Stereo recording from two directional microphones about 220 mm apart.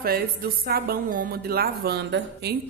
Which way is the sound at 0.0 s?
45° right (ahead or behind).